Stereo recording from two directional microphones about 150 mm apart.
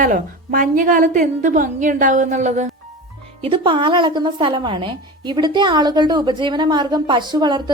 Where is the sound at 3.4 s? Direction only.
35° right (ahead or behind).